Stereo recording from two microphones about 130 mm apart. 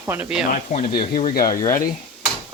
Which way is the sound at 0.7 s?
90° left.